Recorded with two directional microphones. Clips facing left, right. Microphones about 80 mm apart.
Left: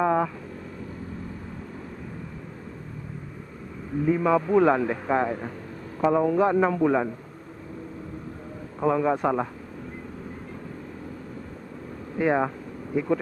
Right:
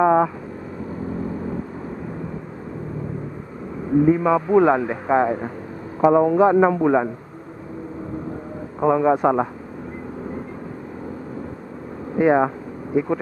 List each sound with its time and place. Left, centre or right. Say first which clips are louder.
0.0 s vehicle: right 7 dB; centre
3.9 s a man's voice: right 6 dB; right
8.8 s a man's voice: right 6 dB; centre
12.2 s a man's voice: right 7 dB; centre